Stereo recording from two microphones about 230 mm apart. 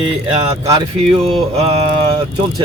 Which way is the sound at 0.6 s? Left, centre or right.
Centre.